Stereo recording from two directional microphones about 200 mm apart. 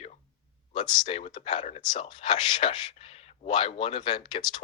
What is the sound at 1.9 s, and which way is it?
Speech, 25° left (ahead or behind).